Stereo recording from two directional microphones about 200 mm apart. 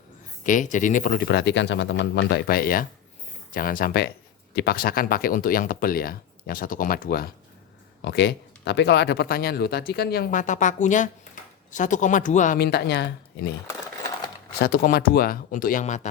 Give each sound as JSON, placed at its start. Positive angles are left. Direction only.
{"t": 0.4, "sound": "speech", "side_deg": 40}
{"t": 8.0, "sound": "speech", "side_deg": 55}
{"t": 14.6, "sound": "speech", "side_deg": 50}